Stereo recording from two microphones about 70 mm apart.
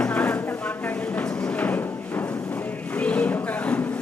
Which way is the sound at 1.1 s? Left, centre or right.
Left.